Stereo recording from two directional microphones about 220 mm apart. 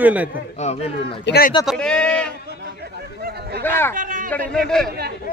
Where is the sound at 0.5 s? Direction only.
30° left (ahead or behind).